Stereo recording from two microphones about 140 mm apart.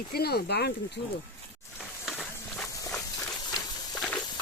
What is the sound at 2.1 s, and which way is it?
Walk, centre (ahead or behind).